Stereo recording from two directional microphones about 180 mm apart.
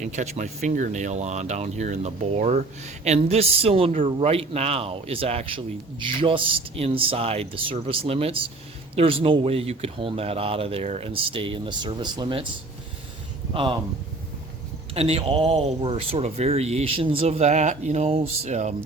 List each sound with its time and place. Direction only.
0.0 s speech: 40° right (ahead or behind); by 12.5 s 25° right (ahead or behind)
13.5 s speech: 30° right (ahead or behind)
14.9 s speech: 35° right (ahead or behind)